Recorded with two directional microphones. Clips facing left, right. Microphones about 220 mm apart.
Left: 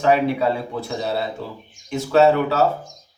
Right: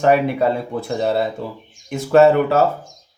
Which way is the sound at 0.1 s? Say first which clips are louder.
Right 1 dB; 50° right (ahead or behind).